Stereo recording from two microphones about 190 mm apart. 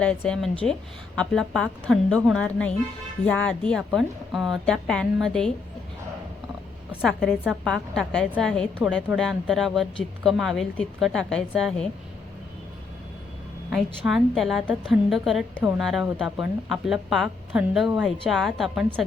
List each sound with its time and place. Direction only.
0.0 s a woman's voice: 5° left (ahead or behind)
7.0 s a woman's voice: centre (ahead or behind)
13.7 s a woman's voice: 5° right (ahead or behind)